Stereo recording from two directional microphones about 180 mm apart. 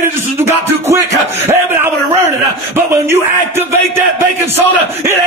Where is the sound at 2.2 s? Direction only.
15° right (ahead or behind).